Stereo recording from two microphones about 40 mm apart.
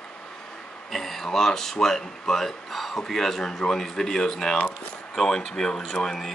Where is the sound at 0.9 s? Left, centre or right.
Centre.